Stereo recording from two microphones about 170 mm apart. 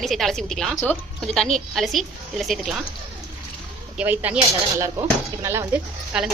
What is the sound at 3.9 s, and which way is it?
A woman's voice, 10° right (ahead or behind).